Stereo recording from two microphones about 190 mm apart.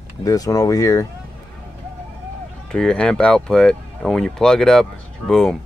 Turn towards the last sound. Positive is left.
turn(degrees=0)  # may be behind; listen again after turning